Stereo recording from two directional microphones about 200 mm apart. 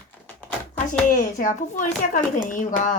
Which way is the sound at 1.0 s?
40° left (ahead or behind).